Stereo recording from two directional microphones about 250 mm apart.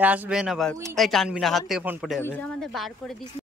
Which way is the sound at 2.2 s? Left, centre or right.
Centre.